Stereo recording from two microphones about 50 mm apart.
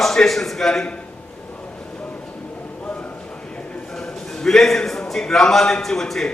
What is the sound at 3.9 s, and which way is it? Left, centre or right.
A man's voice, centre.